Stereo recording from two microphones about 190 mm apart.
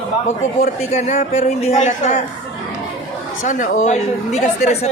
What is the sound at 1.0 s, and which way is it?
Speech, 40° left (ahead or behind).